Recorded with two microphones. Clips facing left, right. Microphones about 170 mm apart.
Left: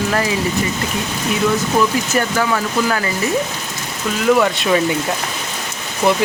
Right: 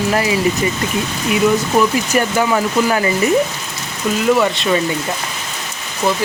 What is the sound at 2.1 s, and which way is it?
Speech, 15° right (ahead or behind).